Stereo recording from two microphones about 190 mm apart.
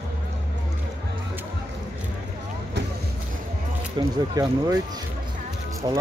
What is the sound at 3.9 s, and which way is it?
Speech, 20° right (ahead or behind).